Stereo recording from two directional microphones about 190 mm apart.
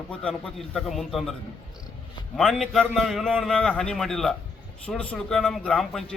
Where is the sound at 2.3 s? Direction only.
Centre (ahead or behind).